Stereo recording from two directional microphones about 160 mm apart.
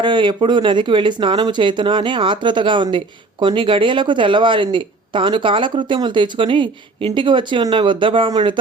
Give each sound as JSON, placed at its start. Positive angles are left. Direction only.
{"t": 0.0, "sound": "speech", "side_deg": -30}